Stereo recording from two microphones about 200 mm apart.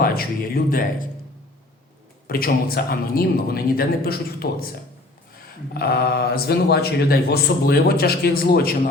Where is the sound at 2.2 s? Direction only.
50° left (ahead or behind).